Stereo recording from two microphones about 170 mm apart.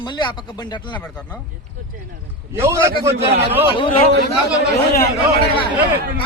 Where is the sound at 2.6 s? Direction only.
15° right (ahead or behind).